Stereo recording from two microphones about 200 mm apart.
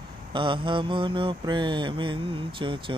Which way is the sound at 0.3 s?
25° right (ahead or behind).